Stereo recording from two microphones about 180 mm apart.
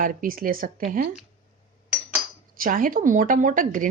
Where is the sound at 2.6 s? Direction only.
50° right (ahead or behind).